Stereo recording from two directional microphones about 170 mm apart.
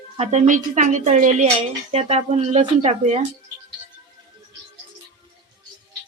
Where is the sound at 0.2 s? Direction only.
40° right (ahead or behind).